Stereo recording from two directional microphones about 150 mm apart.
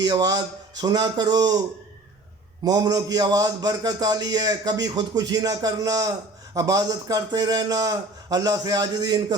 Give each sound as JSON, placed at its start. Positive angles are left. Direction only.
{"t": 0.0, "sound": "a man's voice", "side_deg": -25}
{"t": 2.6, "sound": "a man's voice", "side_deg": -25}